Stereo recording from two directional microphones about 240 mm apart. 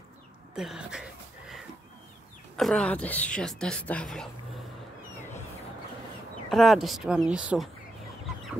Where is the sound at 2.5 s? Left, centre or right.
Centre.